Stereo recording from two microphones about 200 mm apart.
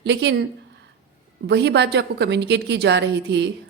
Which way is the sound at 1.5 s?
60° right (ahead or behind).